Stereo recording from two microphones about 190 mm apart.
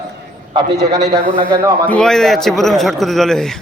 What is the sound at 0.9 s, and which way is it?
Speech, 20° right (ahead or behind).